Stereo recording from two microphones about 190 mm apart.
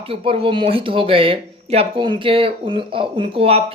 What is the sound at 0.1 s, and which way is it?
Speech, 30° right (ahead or behind).